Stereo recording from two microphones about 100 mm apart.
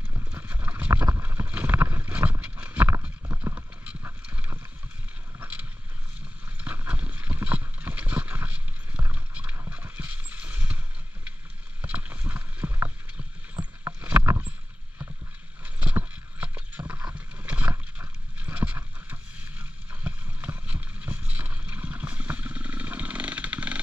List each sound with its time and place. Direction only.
0.3 s clip-clop: 15° right (ahead or behind)
1.2 s boat: 20° right (ahead or behind)
2.4 s horse: 15° right (ahead or behind)
3.5 s clip-clop: 10° right (ahead or behind)
6.6 s clip-clop: 15° right (ahead or behind)
9.0 s vehicle: 15° right (ahead or behind)
11.8 s rowboat: 15° right (ahead or behind)
13.9 s rowboat: 15° right (ahead or behind)
15.6 s boat: 15° right (ahead or behind)
17.1 s horse: 15° right (ahead or behind)
19.9 s boat: 15° right (ahead or behind)